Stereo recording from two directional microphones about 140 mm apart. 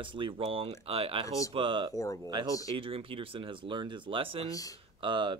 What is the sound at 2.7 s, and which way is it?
Speech, 40° right (ahead or behind).